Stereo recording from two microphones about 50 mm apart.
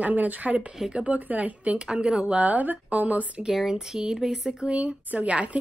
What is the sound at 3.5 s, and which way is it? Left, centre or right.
Speech, centre.